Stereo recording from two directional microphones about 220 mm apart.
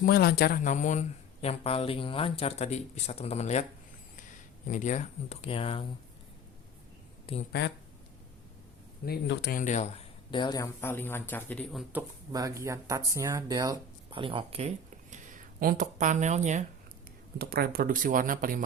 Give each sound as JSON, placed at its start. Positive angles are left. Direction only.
{"t": 0.0, "sound": "a man's voice", "side_deg": 45}
{"t": 4.7, "sound": "speech", "side_deg": 35}
{"t": 7.3, "sound": "speech", "side_deg": 25}
{"t": 9.0, "sound": "a man's voice", "side_deg": 50}
{"t": 10.3, "sound": "speech", "side_deg": 20}
{"t": 15.6, "sound": "speech", "side_deg": -35}
{"t": 17.3, "sound": "speech", "side_deg": -45}